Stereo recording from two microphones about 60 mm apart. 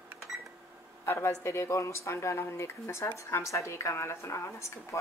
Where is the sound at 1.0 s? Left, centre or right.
Left.